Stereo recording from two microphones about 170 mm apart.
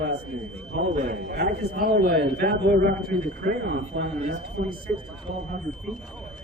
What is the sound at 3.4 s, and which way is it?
Speech, 85° right.